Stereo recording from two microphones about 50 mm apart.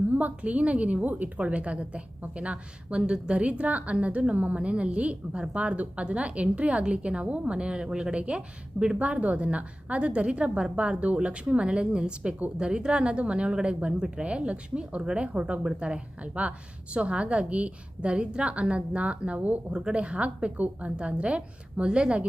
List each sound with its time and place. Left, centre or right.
0.1 s a woman's voice: right